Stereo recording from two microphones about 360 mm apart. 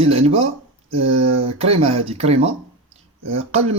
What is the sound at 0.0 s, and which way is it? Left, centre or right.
Speech, centre.